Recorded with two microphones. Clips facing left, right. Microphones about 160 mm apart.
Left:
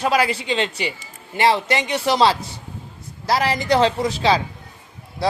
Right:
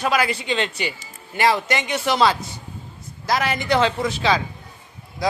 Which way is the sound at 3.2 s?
30° left (ahead or behind).